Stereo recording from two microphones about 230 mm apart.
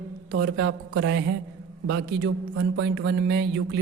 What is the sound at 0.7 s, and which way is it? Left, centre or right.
Speech, right.